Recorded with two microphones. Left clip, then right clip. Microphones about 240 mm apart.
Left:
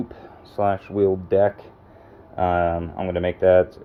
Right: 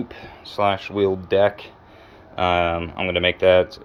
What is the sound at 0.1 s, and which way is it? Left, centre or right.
Speech, centre.